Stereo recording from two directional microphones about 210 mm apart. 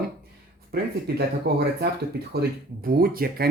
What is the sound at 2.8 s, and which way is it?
Speech, 45° right (ahead or behind).